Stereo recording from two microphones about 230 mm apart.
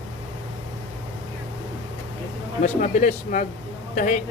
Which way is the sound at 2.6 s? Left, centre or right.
Left.